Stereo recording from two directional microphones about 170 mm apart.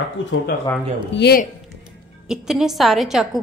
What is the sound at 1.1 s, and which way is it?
Speech, 75° left (ahead or behind).